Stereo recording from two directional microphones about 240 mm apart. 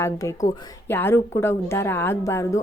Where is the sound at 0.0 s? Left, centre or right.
Centre.